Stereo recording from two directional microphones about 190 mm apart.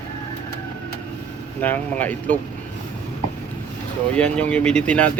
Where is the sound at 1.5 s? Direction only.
10° left (ahead or behind).